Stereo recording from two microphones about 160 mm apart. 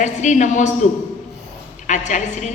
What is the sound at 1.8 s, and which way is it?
Speech, 50° left (ahead or behind).